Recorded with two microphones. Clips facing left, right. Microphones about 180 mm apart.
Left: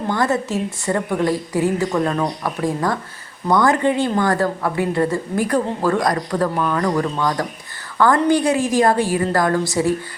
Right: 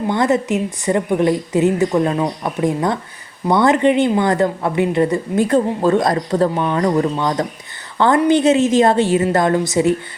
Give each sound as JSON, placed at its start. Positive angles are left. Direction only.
{"t": 0.1, "sound": "a woman's voice", "side_deg": -20}